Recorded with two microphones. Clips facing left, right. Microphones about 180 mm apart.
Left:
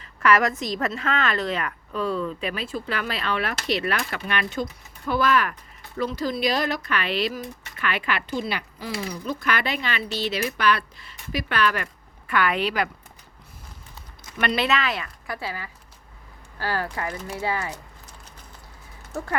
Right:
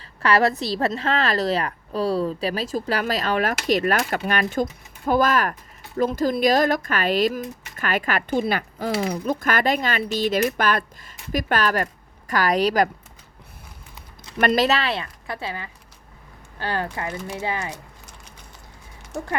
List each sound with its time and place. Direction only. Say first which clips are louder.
0.0 s a woman's voice: right 1 dB; 30° right (ahead or behind)
14.3 s a woman's voice: right 5 dB; 35° right (ahead or behind); by 17.7 s 20° right (ahead or behind)